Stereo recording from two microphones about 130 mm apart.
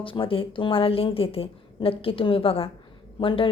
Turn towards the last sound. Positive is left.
turn(degrees=40)  # may be behind; listen again after turning